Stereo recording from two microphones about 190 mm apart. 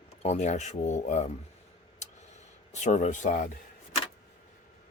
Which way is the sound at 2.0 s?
40° left (ahead or behind).